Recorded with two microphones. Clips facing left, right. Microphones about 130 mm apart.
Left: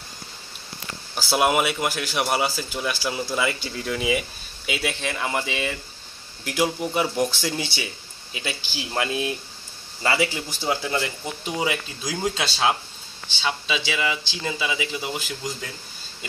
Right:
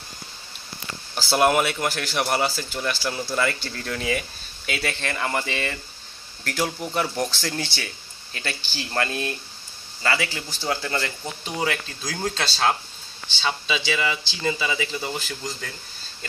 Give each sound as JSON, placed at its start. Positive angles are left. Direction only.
{"t": 1.1, "sound": "speech", "side_deg": 5}
{"t": 10.0, "sound": "speech", "side_deg": 20}